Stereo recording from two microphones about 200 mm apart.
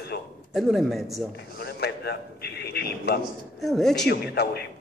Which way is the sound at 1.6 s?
55° left (ahead or behind).